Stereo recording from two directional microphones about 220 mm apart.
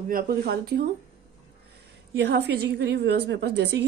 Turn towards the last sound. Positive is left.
turn(degrees=-50)  # may be behind; listen again after turning